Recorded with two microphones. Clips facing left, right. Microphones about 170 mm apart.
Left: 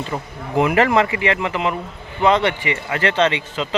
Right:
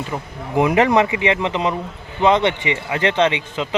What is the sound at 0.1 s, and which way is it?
Speech, 5° right (ahead or behind).